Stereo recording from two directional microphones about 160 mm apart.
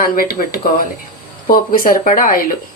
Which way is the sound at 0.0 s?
65° left (ahead or behind).